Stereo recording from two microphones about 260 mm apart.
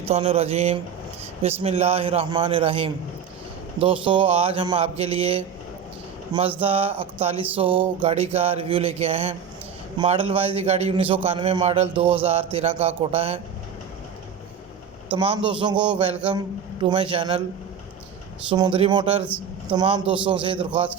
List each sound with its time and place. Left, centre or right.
0.0 s a man's voice: right
6.6 s a man's voice: right
15.1 s a man's voice: centre
18.5 s a man's voice: centre
19.2 s a sound: centre
19.7 s a man's voice: centre